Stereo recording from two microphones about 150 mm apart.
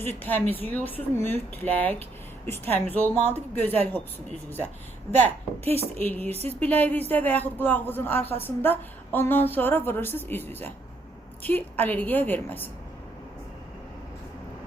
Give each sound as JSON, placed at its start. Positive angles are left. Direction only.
{"t": 0.0, "sound": "a woman's voice", "side_deg": 15}
{"t": 5.6, "sound": "speech", "side_deg": -40}
{"t": 6.0, "sound": "a woman's voice", "side_deg": 10}